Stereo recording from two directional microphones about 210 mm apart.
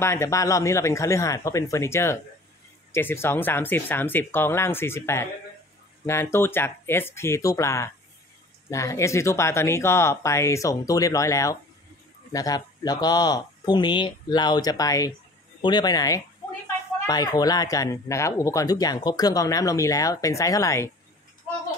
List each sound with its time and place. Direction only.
0.0 s speech: 10° left (ahead or behind)